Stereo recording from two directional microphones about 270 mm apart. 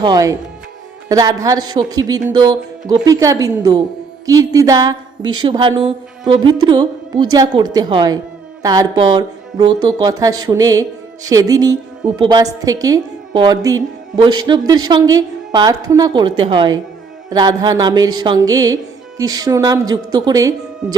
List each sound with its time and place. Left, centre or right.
0.0 s a woman's voice: centre